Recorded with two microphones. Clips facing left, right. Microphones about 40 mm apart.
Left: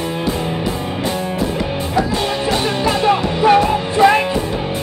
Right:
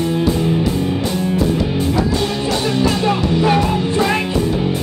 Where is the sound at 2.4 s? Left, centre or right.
Left.